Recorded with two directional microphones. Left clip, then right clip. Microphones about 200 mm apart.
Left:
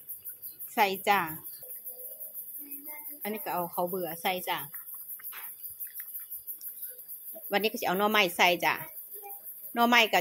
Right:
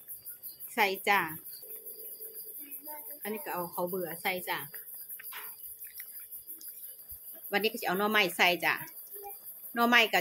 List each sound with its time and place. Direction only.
0.7 s a woman's voice: 15° left (ahead or behind)
3.2 s a woman's voice: 25° left (ahead or behind)
7.4 s a woman's voice: 20° left (ahead or behind)